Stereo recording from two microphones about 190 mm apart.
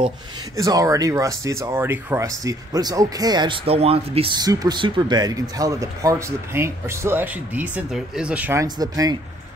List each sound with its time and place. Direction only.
0.6 s speech: 15° right (ahead or behind)
8.6 s speech: 20° right (ahead or behind)